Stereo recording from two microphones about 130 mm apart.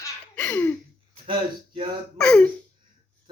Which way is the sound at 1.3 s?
40° right (ahead or behind).